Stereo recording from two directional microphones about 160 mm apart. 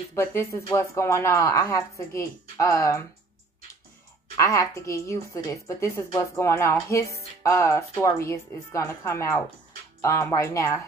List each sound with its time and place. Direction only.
0.1 s speech: 15° left (ahead or behind)
4.4 s a woman's voice: 20° left (ahead or behind)